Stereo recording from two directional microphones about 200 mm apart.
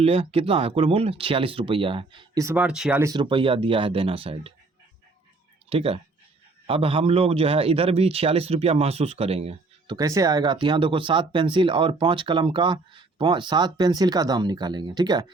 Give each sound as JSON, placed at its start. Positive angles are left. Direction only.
{"t": 0.0, "sound": "a man's voice", "side_deg": -30}
{"t": 3.0, "sound": "a man's voice", "side_deg": -20}
{"t": 5.6, "sound": "a man's voice", "side_deg": -30}